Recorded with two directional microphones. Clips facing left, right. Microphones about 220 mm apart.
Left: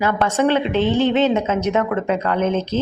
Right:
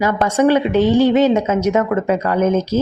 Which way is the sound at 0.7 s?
40° right (ahead or behind).